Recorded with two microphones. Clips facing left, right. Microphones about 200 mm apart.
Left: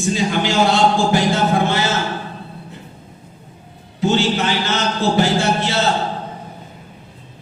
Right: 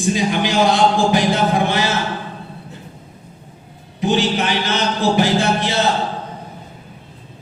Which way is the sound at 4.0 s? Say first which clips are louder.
Even; 15° right (ahead or behind).